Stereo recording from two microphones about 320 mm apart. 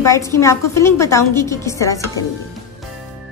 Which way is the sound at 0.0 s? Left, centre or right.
Centre.